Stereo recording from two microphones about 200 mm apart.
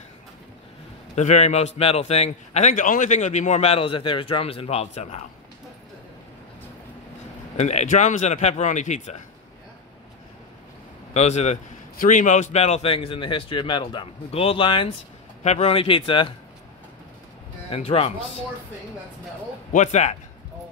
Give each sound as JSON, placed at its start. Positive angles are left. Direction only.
{"t": 1.1, "sound": "a man's voice", "side_deg": 35}
{"t": 7.5, "sound": "a man's voice", "side_deg": 35}
{"t": 11.1, "sound": "a man's voice", "side_deg": 35}
{"t": 17.6, "sound": "speech", "side_deg": 30}
{"t": 19.7, "sound": "a man's voice", "side_deg": 35}